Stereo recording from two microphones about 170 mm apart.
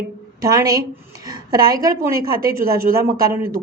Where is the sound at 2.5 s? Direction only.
60° right (ahead or behind).